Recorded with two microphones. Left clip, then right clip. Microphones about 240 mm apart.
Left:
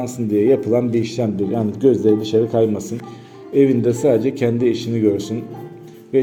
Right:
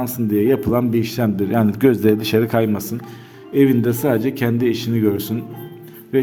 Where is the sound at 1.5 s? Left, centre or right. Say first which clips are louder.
Right 3 dB; right.